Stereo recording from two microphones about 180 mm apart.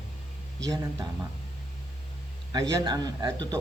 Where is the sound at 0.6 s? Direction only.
20° right (ahead or behind).